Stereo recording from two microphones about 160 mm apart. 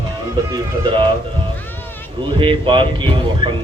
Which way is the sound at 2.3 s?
30° right (ahead or behind).